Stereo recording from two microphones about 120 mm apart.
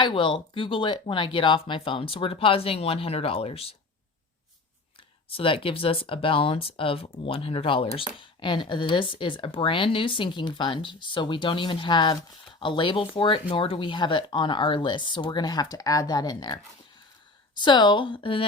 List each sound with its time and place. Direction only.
0.0 s speech: 40° left (ahead or behind)
5.3 s speech: 50° left (ahead or behind)
17.6 s speech: 40° left (ahead or behind)